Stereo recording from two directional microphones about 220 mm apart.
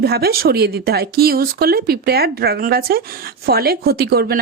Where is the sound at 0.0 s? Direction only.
45° right (ahead or behind).